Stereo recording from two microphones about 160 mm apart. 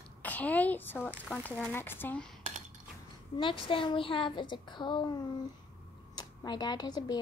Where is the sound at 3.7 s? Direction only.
35° left (ahead or behind).